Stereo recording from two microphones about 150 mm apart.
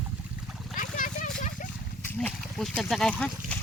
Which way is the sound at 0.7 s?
65° left (ahead or behind).